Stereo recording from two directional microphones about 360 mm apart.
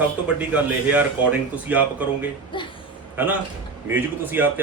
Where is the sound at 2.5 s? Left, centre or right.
Centre.